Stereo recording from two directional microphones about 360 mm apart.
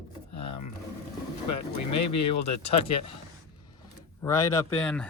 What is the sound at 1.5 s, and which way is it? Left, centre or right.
Speech, left.